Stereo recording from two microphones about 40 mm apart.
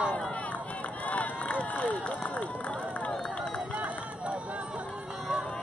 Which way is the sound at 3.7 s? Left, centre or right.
Right.